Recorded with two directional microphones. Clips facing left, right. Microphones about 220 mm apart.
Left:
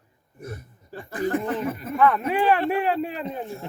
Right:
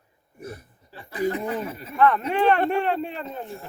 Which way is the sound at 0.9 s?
50° left (ahead or behind).